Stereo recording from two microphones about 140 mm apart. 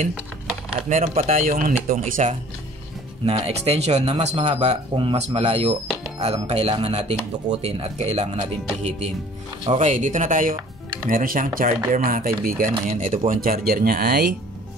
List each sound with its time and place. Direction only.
0.8 s speech: 60° right (ahead or behind)
3.4 s speech: 45° right (ahead or behind)
4.9 s speech: 40° right (ahead or behind)
9.7 s speech: 55° right (ahead or behind)
10.5 s music: 15° right (ahead or behind)
11.1 s speech: 80° right
12.1 s speech: 90° right
13.3 s speech: 90° right